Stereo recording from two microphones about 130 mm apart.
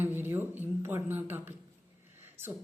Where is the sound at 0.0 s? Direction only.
15° right (ahead or behind).